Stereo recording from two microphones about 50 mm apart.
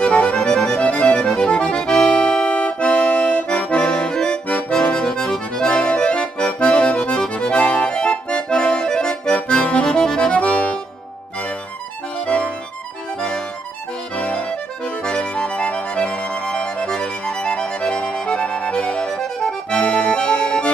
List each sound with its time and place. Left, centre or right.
0.0 s music: left
5.0 s accordion: centre
9.8 s music: centre
10.3 s accordion: left
12.3 s accordion: left
14.1 s accordion: left